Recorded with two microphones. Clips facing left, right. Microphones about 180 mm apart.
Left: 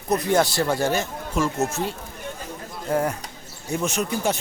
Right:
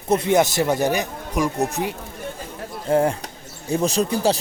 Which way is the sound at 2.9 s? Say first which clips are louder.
Right 5 dB; 25° right (ahead or behind).